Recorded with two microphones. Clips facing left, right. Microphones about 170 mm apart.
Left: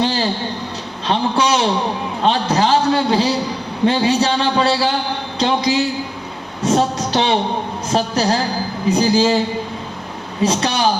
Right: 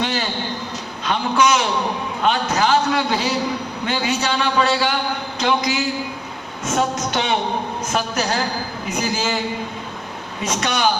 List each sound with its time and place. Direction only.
0.0 s a sound: 30° left (ahead or behind)
1.0 s a man's voice: 30° left (ahead or behind)
10.4 s a man's voice: 30° left (ahead or behind)